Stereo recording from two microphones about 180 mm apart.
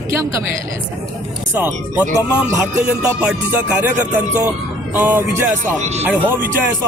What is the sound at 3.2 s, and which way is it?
A woman's voice, 5° right (ahead or behind).